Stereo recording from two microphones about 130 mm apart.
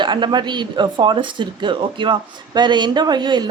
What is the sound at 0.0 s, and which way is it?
Speech, 35° right (ahead or behind).